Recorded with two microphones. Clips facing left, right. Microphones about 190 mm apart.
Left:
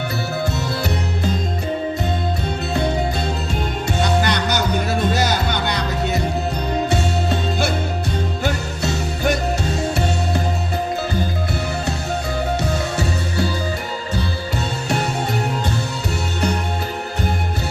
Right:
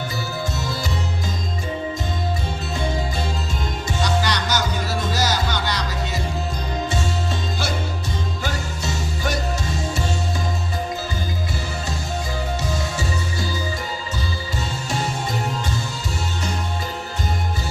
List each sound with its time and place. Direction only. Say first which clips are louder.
4.0 s music: left 3 dB; 60° left (ahead or behind)
13.0 s music: left 5 dB; 65° left (ahead or behind)